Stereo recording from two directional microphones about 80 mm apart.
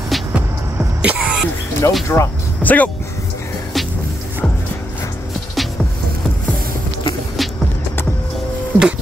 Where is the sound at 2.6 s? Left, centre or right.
Left.